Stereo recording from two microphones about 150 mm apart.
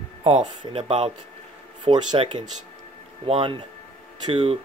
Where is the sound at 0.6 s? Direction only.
40° right (ahead or behind).